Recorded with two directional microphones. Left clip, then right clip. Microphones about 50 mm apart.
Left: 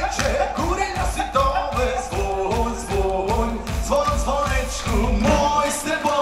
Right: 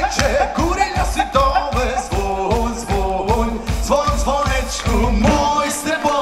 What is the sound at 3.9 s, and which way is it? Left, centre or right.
Music, right.